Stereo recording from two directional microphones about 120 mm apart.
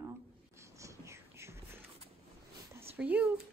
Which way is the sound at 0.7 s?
25° right (ahead or behind).